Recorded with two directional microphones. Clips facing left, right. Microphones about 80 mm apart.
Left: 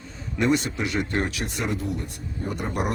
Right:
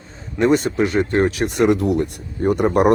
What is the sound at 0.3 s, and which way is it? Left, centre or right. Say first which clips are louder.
Speech: right 7 dB; right.